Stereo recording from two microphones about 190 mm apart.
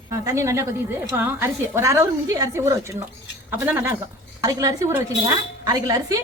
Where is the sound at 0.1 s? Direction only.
15° right (ahead or behind).